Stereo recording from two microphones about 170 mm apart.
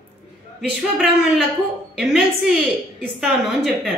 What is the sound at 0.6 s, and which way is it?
A woman's voice, centre (ahead or behind).